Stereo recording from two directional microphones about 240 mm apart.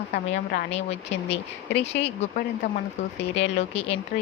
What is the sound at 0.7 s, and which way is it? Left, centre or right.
Speech, left.